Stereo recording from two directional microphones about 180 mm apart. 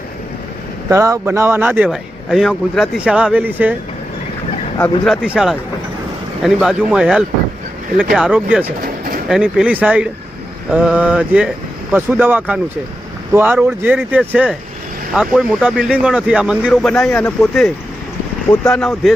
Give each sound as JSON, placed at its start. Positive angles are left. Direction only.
{"t": 0.9, "sound": "speech", "side_deg": -15}
{"t": 4.8, "sound": "speech", "side_deg": 0}
{"t": 8.8, "sound": "pigeon", "side_deg": -50}
{"t": 9.3, "sound": "speech", "side_deg": -5}
{"t": 16.9, "sound": "a man's voice", "side_deg": 15}
{"t": 17.4, "sound": "speech", "side_deg": 0}
{"t": 18.7, "sound": "speech", "side_deg": 0}